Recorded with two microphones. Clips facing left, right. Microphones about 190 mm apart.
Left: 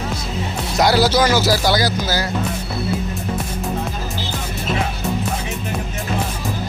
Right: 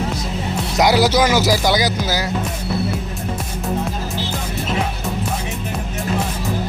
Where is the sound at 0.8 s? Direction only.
20° right (ahead or behind).